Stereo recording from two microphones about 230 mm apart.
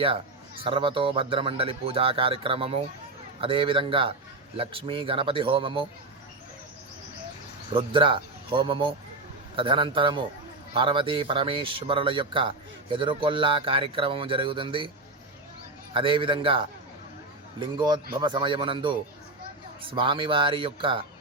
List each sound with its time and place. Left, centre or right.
0.6 s speech: right
7.7 s speech: right
15.9 s speech: right
17.7 s speech: centre